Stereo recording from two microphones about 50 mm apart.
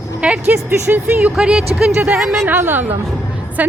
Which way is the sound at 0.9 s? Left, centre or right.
Right.